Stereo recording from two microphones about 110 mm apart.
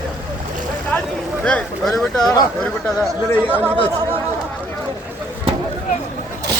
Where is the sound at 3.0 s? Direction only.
15° right (ahead or behind).